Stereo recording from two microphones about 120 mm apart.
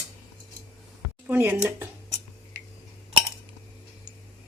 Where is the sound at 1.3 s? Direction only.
20° right (ahead or behind).